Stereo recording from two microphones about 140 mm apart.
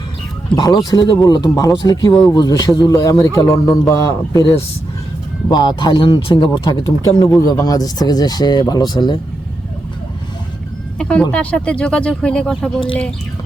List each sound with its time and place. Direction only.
0.5 s speech: 30° left (ahead or behind)
10.9 s speech: 5° left (ahead or behind)